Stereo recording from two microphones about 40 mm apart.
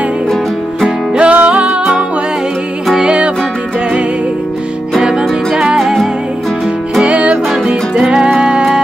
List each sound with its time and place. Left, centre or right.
0.8 s music: centre
1.3 s music: right
5.0 s music: centre
7.1 s music: right
7.9 s music: centre